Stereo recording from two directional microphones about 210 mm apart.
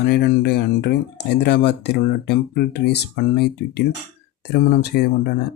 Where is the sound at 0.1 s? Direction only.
50° left (ahead or behind).